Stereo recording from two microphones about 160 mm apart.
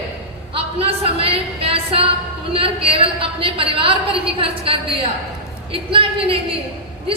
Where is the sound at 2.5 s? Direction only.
35° right (ahead or behind).